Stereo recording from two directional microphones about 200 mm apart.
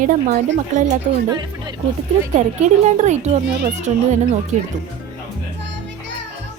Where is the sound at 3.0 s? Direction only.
35° right (ahead or behind).